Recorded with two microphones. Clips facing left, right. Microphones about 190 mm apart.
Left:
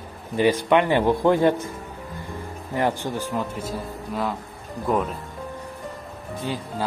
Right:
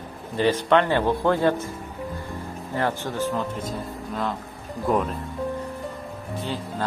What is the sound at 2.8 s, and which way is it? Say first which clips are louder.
Speech: left 1 dB; 15° left (ahead or behind).